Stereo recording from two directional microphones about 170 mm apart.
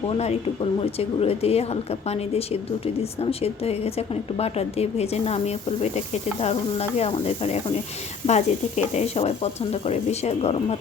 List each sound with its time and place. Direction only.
0.2 s speech: 35° left (ahead or behind)